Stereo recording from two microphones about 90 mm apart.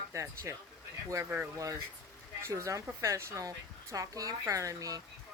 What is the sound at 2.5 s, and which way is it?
Speech, 35° right (ahead or behind).